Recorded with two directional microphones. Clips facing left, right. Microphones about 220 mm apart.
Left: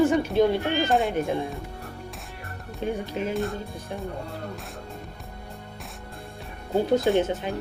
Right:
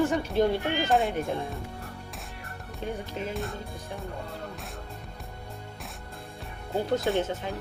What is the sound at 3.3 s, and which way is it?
Speech, centre (ahead or behind).